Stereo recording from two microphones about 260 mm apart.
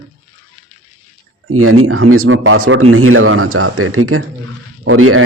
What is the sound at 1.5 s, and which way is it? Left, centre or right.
Speech, right.